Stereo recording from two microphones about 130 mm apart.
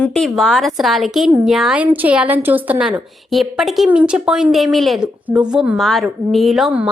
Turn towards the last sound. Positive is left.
turn(degrees=0)  # may be behind; listen again after turning